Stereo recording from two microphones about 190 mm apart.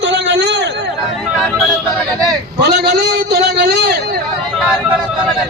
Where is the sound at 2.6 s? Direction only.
60° right (ahead or behind).